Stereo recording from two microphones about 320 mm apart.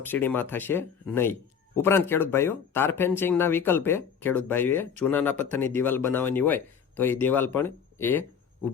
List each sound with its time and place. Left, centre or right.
0.1 s speech: centre